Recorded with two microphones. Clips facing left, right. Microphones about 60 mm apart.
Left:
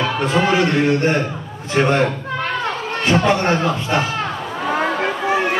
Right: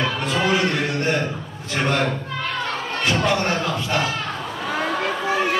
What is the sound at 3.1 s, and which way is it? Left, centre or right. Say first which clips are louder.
Speech: left 5 dB; left.